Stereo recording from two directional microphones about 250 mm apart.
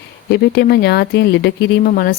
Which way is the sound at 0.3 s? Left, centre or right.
Left.